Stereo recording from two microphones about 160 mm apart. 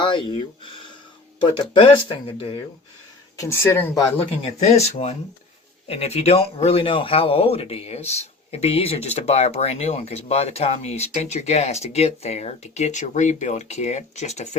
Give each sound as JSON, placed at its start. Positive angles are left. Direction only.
{"t": 0.0, "sound": "speech", "side_deg": 30}
{"t": 1.7, "sound": "speech", "side_deg": 35}
{"t": 3.3, "sound": "speech", "side_deg": 15}
{"t": 4.4, "sound": "speech", "side_deg": 40}